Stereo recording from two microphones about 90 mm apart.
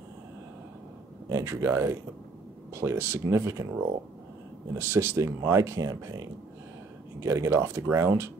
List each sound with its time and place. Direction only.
1.3 s speech: 30° right (ahead or behind)
4.7 s speech: 25° right (ahead or behind)